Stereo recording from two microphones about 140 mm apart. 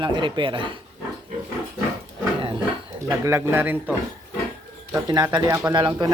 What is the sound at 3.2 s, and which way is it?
Speech, 15° right (ahead or behind).